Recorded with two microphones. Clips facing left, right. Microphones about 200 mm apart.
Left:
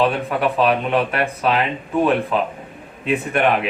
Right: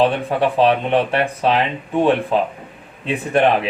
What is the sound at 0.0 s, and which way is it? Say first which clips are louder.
Speech: right 2 dB; 30° right (ahead or behind).